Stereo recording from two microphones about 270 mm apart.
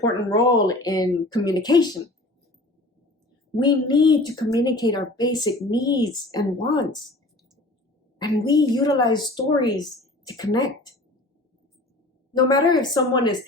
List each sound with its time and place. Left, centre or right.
0.0 s speech: centre
3.6 s speech: centre
8.2 s speech: centre
12.4 s speech: centre